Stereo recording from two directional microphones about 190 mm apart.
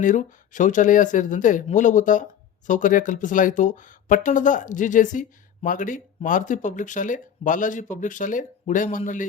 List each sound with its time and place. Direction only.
0.0 s speech: 40° left (ahead or behind)